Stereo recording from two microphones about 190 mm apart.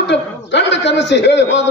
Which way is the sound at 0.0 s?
65° left (ahead or behind).